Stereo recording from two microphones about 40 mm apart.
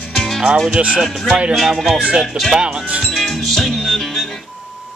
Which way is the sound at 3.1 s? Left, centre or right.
Centre.